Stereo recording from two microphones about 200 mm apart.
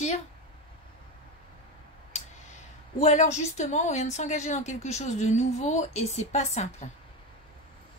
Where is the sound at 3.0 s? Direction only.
35° left (ahead or behind).